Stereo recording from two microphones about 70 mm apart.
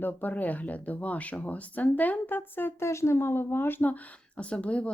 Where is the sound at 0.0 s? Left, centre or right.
Left.